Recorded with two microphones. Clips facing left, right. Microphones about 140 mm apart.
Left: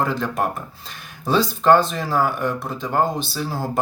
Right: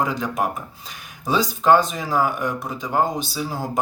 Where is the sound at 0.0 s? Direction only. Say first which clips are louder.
Left 1 dB; 15° right (ahead or behind).